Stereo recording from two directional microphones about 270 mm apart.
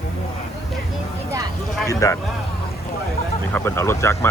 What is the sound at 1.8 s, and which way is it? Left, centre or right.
Speech, centre.